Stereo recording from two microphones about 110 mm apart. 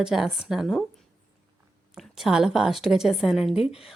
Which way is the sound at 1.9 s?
5° right (ahead or behind).